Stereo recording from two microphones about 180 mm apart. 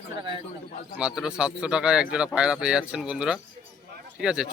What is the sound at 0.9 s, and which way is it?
Speech, 5° right (ahead or behind).